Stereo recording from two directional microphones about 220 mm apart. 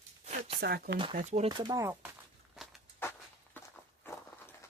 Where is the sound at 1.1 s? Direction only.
30° right (ahead or behind); by 2.1 s 10° right (ahead or behind).